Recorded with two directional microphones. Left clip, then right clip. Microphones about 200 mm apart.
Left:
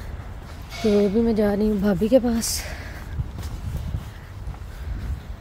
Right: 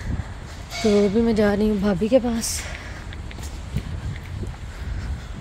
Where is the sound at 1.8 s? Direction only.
20° left (ahead or behind).